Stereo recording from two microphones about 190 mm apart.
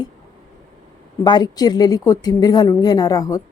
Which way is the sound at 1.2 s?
20° left (ahead or behind).